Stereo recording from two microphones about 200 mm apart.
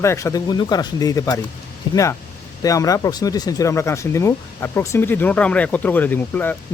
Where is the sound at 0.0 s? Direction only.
15° left (ahead or behind).